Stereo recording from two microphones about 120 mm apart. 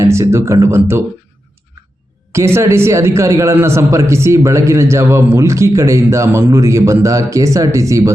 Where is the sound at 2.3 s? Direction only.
20° right (ahead or behind).